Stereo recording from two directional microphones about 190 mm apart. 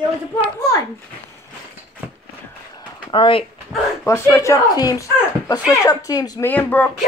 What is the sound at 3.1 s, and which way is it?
Speech, 25° left (ahead or behind).